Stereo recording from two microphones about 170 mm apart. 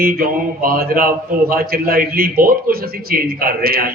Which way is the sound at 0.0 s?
60° right (ahead or behind).